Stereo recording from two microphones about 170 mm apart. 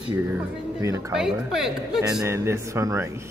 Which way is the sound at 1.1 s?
5° right (ahead or behind).